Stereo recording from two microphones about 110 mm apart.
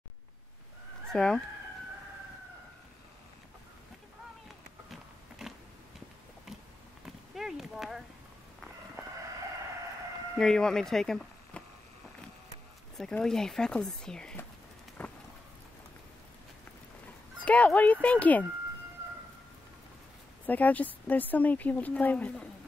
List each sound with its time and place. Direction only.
1.1 s speech: 5° left (ahead or behind)
5.4 s a sound: 5° right (ahead or behind)
7.3 s clip-clop: 5° right (ahead or behind)
10.3 s speech: 5° left (ahead or behind)
13.2 s speech: 5° left (ahead or behind)
15.0 s a sound: 10° left (ahead or behind)
17.5 s speech: 10° left (ahead or behind)
20.4 s speech: 15° left (ahead or behind)